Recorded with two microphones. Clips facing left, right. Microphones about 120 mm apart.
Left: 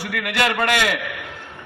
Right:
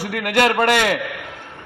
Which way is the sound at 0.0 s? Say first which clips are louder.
Right 4 dB; 40° right (ahead or behind).